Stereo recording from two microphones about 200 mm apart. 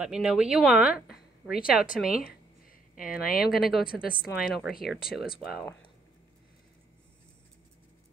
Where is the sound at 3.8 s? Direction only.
45° left (ahead or behind).